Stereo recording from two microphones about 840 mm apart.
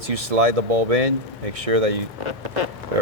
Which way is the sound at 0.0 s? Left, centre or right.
Right.